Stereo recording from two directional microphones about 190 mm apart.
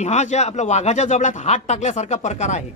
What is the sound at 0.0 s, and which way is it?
Speech, 35° left (ahead or behind).